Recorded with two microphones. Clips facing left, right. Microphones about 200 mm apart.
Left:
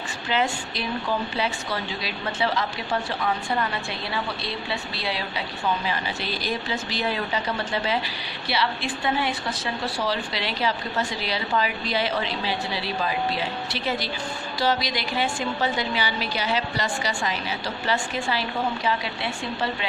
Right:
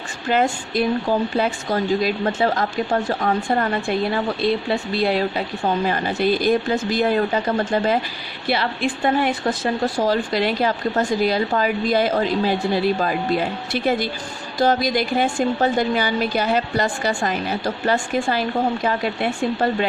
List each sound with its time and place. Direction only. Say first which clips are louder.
0.3 s speech: right 6 dB; 50° right (ahead or behind)